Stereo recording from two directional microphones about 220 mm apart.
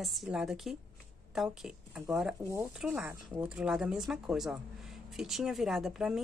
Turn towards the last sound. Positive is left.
turn(degrees=0)  # may be behind; listen again after turning